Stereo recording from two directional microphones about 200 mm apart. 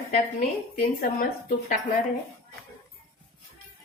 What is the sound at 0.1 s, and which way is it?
A woman's voice, 40° left (ahead or behind).